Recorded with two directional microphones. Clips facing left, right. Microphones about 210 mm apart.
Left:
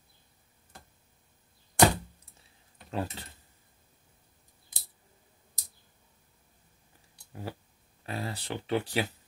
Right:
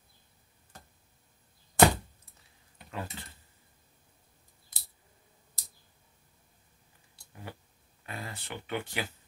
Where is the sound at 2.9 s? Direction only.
35° left (ahead or behind).